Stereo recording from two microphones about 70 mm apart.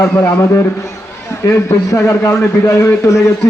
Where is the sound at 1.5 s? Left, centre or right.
Left.